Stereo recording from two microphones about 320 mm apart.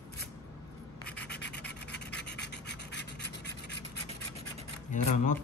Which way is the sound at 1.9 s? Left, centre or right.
Left.